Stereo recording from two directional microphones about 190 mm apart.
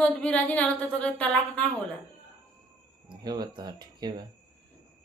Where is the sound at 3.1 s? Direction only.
20° right (ahead or behind).